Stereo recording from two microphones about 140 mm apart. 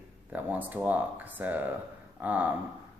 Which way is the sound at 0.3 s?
10° right (ahead or behind).